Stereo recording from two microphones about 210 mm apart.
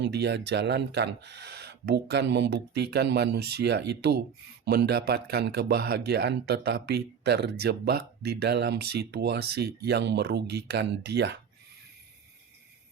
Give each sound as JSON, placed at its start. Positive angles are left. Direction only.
{"t": 0.0, "sound": "speech", "side_deg": -55}